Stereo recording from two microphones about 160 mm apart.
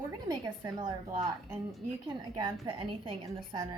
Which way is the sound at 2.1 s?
30° right (ahead or behind).